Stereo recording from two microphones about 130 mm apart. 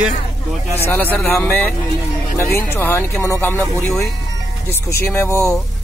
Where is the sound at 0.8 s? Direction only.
15° left (ahead or behind).